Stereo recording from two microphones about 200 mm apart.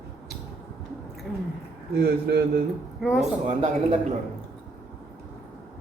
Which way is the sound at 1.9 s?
50° right (ahead or behind).